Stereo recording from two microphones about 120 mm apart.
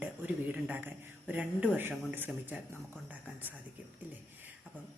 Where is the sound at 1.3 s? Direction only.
10° right (ahead or behind).